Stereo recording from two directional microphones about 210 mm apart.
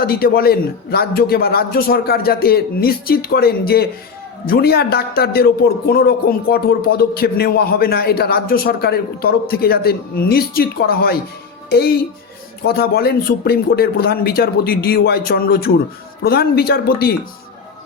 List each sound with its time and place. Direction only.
0.0 s a man's voice: 45° left (ahead or behind)